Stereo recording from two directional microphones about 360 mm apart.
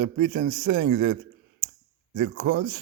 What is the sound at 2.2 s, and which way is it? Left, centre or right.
Speech, right.